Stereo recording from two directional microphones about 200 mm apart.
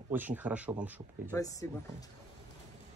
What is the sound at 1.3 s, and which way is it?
Speech, 15° left (ahead or behind).